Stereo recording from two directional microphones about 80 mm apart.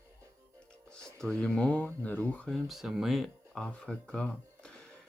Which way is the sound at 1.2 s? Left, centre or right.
Centre.